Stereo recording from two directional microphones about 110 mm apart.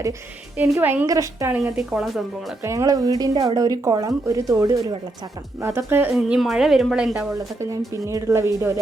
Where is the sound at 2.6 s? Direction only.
30° right (ahead or behind).